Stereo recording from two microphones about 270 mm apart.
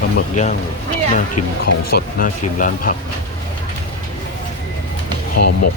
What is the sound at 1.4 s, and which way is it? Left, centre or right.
Speech, left.